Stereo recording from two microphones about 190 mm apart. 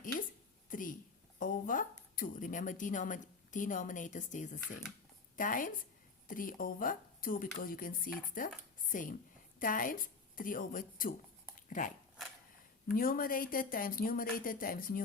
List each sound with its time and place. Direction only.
0.7 s a sound: 45° left (ahead or behind)
1.4 s a woman's voice: 45° left (ahead or behind)
13.0 s speech: 50° left (ahead or behind)